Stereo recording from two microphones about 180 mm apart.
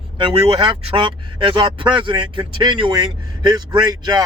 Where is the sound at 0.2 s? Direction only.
30° right (ahead or behind).